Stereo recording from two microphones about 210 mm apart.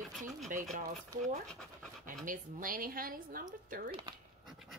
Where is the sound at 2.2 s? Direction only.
40° right (ahead or behind).